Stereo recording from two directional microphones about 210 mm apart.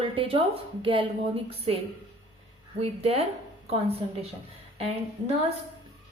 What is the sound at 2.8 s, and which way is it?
A woman's voice, 30° right (ahead or behind).